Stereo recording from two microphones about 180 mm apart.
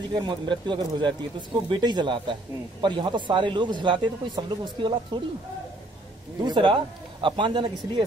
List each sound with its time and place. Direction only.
0.1 s speech: 25° right (ahead or behind)
6.4 s speech: 25° right (ahead or behind)